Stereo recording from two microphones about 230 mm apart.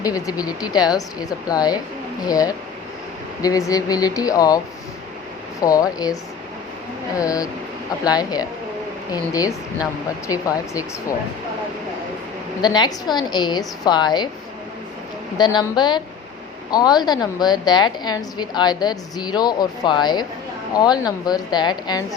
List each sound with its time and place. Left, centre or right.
0.0 s a woman's voice: centre
7.2 s a woman's voice: centre
12.6 s a woman's voice: centre
15.4 s a woman's voice: centre